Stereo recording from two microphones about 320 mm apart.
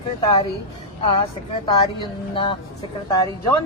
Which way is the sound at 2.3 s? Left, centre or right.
Centre.